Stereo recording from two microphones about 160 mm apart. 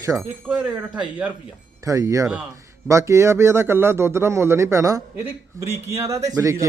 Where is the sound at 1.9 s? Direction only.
20° right (ahead or behind).